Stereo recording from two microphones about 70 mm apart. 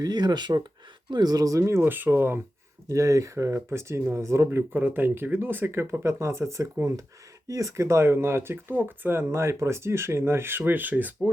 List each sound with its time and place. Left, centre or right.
0.0 s speech: right
1.1 s speech: right
1.6 s speech: right
2.9 s speech: right
4.7 s speech: right